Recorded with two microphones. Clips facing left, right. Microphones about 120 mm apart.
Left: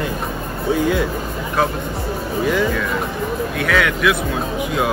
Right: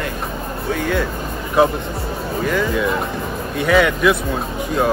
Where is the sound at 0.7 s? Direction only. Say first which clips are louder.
Left 3 dB; 15° left (ahead or behind).